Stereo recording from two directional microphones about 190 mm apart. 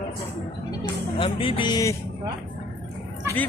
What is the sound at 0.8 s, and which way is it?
Speech, 25° left (ahead or behind).